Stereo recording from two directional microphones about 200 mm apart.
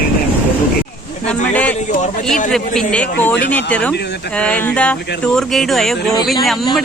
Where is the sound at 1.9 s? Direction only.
40° left (ahead or behind).